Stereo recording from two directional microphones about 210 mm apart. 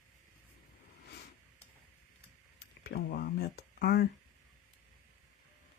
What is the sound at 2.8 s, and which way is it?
Speech, 50° left (ahead or behind).